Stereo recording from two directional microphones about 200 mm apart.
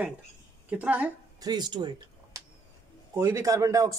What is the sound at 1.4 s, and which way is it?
Speech, 20° right (ahead or behind).